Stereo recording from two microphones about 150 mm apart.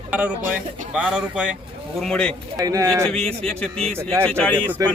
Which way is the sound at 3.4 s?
5° left (ahead or behind).